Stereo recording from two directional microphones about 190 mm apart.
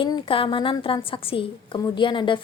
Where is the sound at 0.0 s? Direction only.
25° left (ahead or behind).